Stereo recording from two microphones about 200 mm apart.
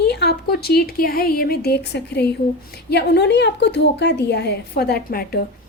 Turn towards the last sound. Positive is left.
turn(degrees=50)  # may be behind; listen again after turning